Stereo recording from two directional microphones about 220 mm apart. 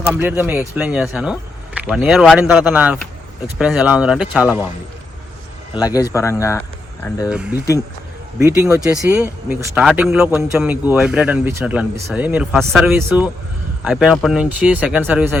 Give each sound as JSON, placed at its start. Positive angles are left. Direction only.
{"t": 0.0, "sound": "speech", "side_deg": -5}
{"t": 5.7, "sound": "speech", "side_deg": 15}
{"t": 8.4, "sound": "speech", "side_deg": -10}